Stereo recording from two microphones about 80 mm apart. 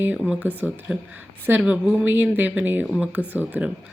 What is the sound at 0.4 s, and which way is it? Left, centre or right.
Speech, right.